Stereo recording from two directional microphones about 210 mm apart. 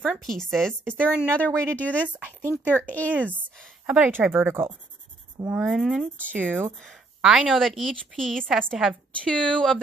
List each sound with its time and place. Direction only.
0.0 s speech: centre (ahead or behind)
3.8 s speech: 5° right (ahead or behind)